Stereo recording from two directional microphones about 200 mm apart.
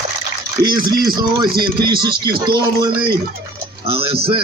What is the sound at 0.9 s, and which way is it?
Speech, 20° right (ahead or behind).